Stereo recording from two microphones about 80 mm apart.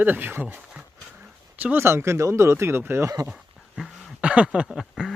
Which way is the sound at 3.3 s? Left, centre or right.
Centre.